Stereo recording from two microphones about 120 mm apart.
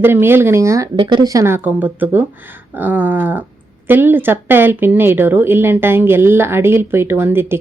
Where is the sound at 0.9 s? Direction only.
40° right (ahead or behind); by 2.2 s 15° right (ahead or behind).